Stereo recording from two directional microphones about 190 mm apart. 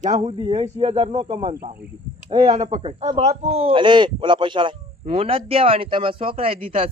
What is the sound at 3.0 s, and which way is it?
A man's voice, 35° right (ahead or behind).